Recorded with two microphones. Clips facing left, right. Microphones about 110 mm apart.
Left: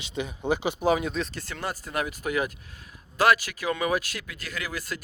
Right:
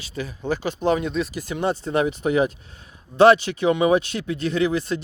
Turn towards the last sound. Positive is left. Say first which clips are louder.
# right 12 dB
turn(degrees=-25)  # may be behind; listen again after turning